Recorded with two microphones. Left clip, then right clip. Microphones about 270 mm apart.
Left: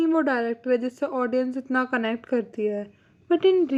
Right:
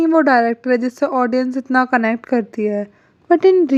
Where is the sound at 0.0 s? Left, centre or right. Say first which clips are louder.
Right 10 dB; centre.